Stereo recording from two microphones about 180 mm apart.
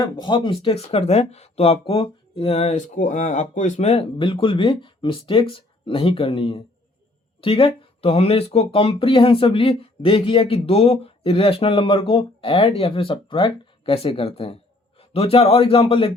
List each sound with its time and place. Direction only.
0.0 s speech: 25° left (ahead or behind)